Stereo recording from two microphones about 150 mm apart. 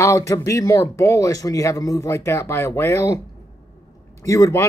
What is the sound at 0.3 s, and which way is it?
Speech, 20° left (ahead or behind).